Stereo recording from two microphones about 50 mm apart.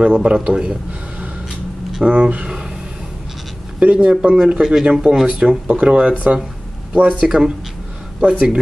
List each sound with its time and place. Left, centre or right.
0.0 s speech: centre
2.0 s speech: right
3.8 s speech: right; by 5.6 s centre
5.7 s speech: right